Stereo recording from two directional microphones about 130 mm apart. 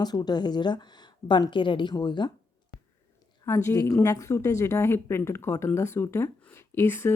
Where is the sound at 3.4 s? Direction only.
20° left (ahead or behind).